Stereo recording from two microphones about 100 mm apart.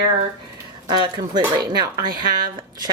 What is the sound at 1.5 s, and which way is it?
Speech, 40° right (ahead or behind).